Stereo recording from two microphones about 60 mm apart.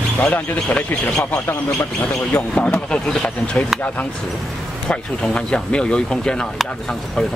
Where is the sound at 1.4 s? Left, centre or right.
Left.